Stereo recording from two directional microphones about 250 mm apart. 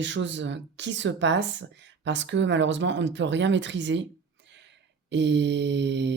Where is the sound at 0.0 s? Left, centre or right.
Right.